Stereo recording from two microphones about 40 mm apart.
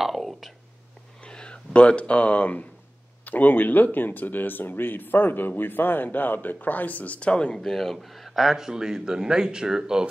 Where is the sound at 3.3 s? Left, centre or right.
Left.